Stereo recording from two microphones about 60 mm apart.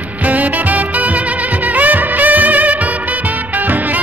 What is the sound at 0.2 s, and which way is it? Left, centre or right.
Music, right.